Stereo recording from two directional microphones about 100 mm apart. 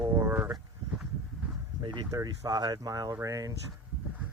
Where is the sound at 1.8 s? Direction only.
40° right (ahead or behind).